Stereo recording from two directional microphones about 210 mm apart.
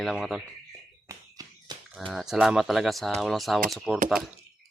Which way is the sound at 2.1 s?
Centre (ahead or behind).